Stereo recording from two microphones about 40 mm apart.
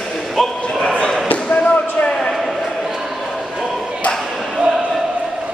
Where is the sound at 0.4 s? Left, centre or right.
Centre.